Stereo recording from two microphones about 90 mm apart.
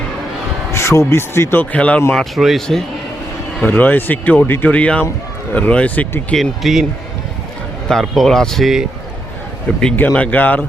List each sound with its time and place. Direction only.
0.7 s speech: 30° left (ahead or behind)
1.7 s speech: 15° left (ahead or behind)
2.1 s speech: centre (ahead or behind)
3.7 s speech: 20° left (ahead or behind)
6.3 s speech: centre (ahead or behind)
7.9 s speech: centre (ahead or behind)
9.7 s speech: 10° left (ahead or behind)